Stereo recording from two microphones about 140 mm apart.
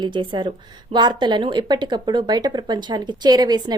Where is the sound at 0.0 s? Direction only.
35° right (ahead or behind).